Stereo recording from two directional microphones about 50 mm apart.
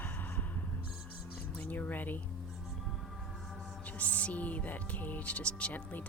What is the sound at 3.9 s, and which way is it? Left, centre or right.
Speech, left.